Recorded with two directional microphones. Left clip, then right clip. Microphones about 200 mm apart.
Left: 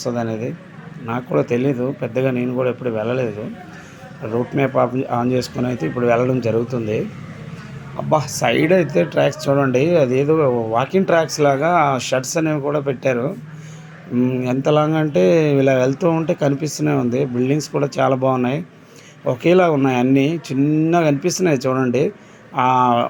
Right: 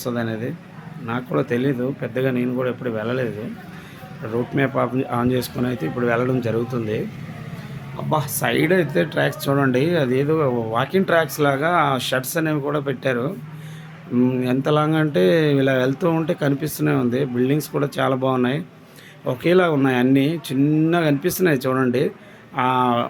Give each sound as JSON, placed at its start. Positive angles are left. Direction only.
{"t": 0.0, "sound": "speech", "side_deg": 0}
{"t": 8.4, "sound": "speech", "side_deg": 5}